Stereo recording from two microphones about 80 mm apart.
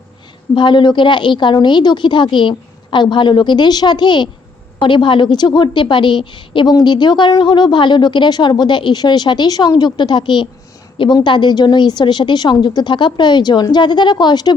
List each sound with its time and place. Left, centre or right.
0.5 s speech: left
4.8 s a woman's voice: left
6.7 s speech: left